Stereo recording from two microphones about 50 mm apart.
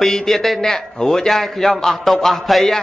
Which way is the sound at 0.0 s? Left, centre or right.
Centre.